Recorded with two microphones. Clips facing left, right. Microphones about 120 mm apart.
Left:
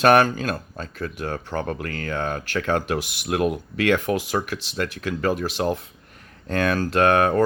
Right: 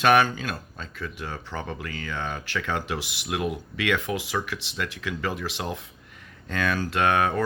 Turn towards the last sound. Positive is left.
turn(degrees=45)  # may be behind; listen again after turning